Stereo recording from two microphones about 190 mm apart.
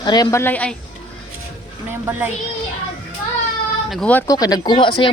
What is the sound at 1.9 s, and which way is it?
Speech, 10° right (ahead or behind).